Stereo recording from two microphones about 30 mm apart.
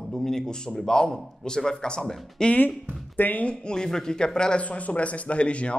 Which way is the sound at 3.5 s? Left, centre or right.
Left.